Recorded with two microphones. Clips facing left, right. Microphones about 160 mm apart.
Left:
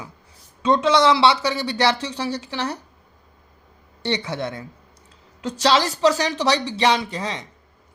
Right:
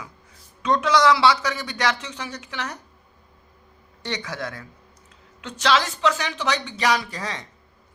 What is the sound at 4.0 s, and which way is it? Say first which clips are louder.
Speech: left 5 dB; 30° left (ahead or behind).